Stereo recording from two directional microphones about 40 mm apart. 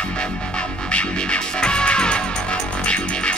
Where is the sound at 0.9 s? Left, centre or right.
Left.